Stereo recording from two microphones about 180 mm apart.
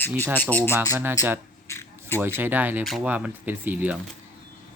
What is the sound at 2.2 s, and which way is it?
Speech, 10° right (ahead or behind).